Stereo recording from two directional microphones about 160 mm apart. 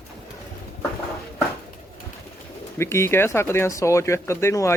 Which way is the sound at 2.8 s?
15° left (ahead or behind).